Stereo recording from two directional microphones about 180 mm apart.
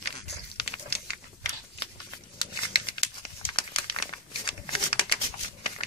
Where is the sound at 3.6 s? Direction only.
25° left (ahead or behind).